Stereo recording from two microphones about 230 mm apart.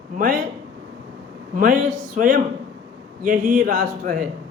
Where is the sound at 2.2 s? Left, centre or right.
Right.